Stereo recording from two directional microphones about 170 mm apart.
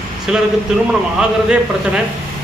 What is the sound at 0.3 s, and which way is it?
Speech, 5° right (ahead or behind).